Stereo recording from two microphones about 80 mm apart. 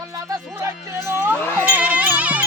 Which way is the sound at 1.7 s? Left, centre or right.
Centre.